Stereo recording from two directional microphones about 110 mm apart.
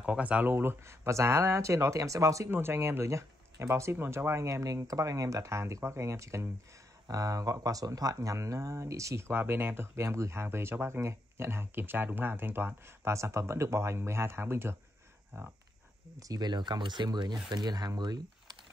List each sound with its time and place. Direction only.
0.0 s speech: 10° right (ahead or behind); by 18.6 s 40° right (ahead or behind)